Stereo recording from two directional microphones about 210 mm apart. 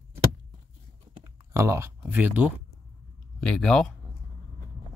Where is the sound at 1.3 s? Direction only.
15° right (ahead or behind).